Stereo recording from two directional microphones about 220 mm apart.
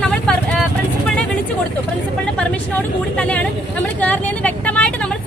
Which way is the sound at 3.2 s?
5° left (ahead or behind).